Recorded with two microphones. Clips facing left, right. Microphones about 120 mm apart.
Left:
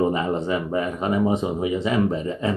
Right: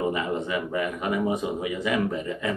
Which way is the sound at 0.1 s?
35° left (ahead or behind).